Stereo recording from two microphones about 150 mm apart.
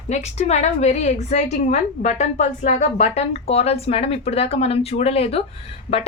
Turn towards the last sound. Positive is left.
turn(degrees=40)  # may be behind; listen again after turning